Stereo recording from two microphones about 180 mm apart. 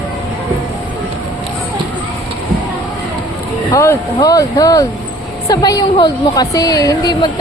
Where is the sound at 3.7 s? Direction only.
20° left (ahead or behind).